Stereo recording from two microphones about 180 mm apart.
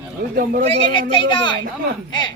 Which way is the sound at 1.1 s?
25° left (ahead or behind).